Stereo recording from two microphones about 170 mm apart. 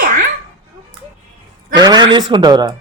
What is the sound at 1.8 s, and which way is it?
Speech, 25° right (ahead or behind).